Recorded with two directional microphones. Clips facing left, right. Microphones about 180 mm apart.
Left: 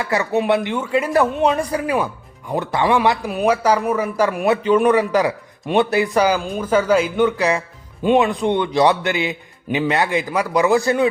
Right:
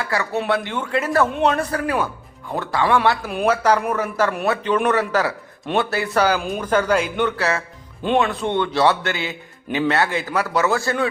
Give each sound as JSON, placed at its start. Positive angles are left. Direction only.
{"t": 0.0, "sound": "a man's voice", "side_deg": 20}